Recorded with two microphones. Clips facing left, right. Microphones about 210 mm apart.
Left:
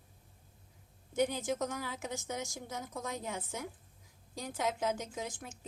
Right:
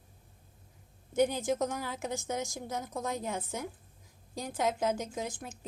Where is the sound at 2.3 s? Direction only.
45° right (ahead or behind).